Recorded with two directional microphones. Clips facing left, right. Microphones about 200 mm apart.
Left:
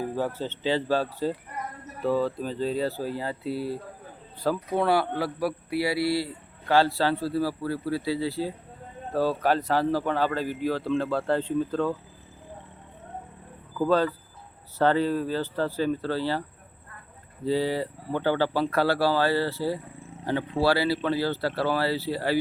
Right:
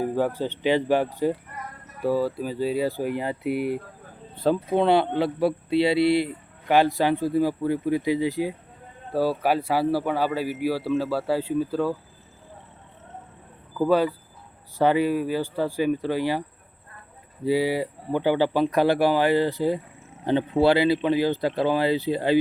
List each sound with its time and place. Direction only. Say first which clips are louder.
0.0 s a man's voice: right 4 dB; 15° right (ahead or behind)
13.7 s a man's voice: right 2 dB; 10° right (ahead or behind)
17.4 s a man's voice: right 3 dB; 10° right (ahead or behind)